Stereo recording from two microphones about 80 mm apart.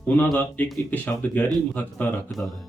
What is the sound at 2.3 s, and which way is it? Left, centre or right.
Speech, centre.